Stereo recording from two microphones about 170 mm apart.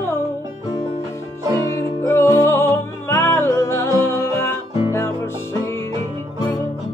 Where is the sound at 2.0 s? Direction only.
15° left (ahead or behind).